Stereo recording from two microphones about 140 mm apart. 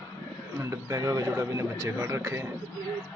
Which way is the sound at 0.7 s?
20° right (ahead or behind).